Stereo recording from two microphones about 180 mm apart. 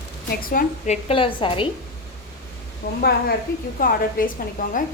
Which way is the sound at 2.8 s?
50° left (ahead or behind).